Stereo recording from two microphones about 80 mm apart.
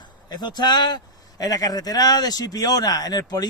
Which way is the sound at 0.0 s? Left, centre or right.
Left.